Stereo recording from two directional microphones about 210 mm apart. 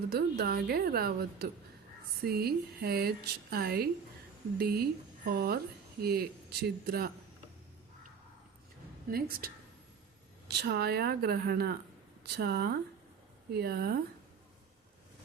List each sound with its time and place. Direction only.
0.1 s speech: 50° right (ahead or behind)
9.0 s speech: 45° right (ahead or behind)
10.5 s speech: 50° right (ahead or behind)